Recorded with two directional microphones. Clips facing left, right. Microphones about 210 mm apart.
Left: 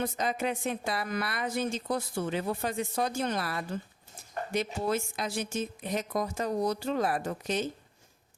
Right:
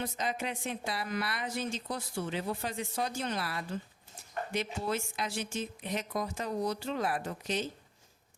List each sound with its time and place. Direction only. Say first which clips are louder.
0.0 s a woman's voice: left 4 dB; 45° left (ahead or behind)